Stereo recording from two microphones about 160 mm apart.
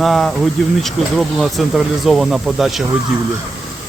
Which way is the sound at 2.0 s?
5° right (ahead or behind).